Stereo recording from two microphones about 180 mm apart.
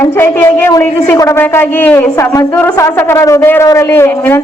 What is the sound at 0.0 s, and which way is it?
A woman's voice, 15° left (ahead or behind).